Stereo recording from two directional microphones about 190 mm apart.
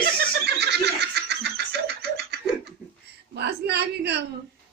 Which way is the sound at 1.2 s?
60° right (ahead or behind).